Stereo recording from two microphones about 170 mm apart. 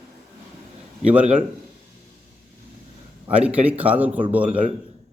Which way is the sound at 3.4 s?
10° right (ahead or behind).